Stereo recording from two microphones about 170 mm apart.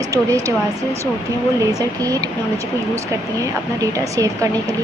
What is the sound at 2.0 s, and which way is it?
Speech, 20° right (ahead or behind).